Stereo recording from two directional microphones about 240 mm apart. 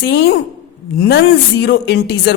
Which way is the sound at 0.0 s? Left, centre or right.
Left.